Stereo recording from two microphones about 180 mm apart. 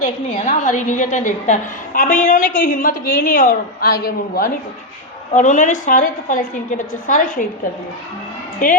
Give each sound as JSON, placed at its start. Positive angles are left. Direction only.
{"t": 0.4, "sound": "a woman's voice", "side_deg": 45}
{"t": 5.3, "sound": "a woman's voice", "side_deg": 45}
{"t": 8.6, "sound": "a woman's voice", "side_deg": 50}